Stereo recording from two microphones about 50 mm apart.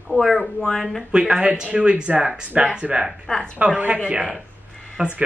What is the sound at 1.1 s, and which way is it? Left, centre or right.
Speech, centre.